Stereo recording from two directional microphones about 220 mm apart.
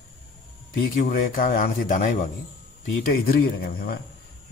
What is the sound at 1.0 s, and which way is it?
A man's voice, 40° left (ahead or behind).